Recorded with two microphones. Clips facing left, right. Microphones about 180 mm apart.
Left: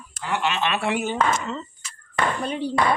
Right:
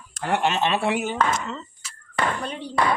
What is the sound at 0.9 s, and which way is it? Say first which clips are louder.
Speech: even; 5° right (ahead or behind).